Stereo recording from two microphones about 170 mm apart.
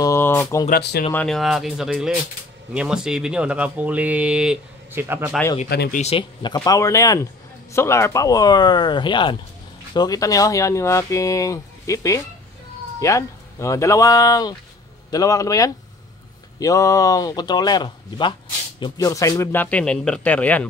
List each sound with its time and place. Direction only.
0.0 s speech: 15° left (ahead or behind)
0.7 s speech: 70° left (ahead or behind)
1.1 s speech: centre (ahead or behind)
5.0 s speech: 15° right (ahead or behind)
5.9 s speech: 40° left (ahead or behind); by 20.6 s 10° left (ahead or behind)